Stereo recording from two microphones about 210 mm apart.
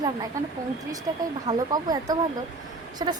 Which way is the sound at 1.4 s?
20° right (ahead or behind).